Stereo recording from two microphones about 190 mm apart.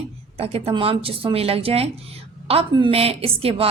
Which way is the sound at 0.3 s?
30° right (ahead or behind).